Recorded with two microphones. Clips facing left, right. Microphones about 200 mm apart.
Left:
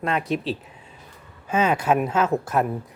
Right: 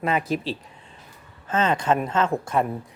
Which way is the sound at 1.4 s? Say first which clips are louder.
Left 1 dB; 10° left (ahead or behind).